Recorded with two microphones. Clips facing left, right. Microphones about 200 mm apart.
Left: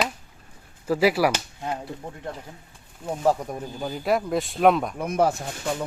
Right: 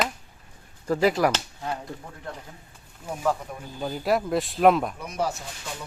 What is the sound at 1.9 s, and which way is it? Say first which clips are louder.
Speech: left 3 dB; 20° left (ahead or behind).